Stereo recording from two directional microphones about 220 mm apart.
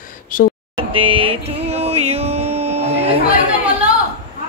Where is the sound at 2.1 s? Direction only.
30° right (ahead or behind).